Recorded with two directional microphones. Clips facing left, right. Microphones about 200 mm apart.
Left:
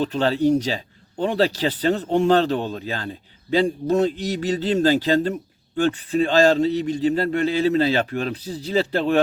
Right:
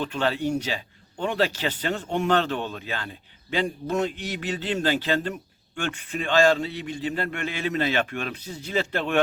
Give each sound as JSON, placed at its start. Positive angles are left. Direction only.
{"t": 0.0, "sound": "speech", "side_deg": 35}